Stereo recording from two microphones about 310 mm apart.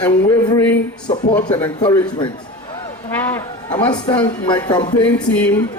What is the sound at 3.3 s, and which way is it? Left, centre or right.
Speech, centre.